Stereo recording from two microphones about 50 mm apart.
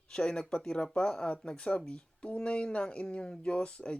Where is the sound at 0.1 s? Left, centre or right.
Centre.